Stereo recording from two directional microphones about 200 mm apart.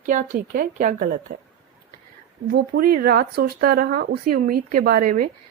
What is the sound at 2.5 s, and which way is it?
Speech, 45° right (ahead or behind).